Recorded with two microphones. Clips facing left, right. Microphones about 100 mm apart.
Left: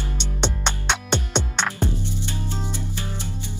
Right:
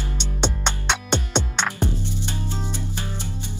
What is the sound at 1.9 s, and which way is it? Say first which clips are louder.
Music: even; 15° left (ahead or behind).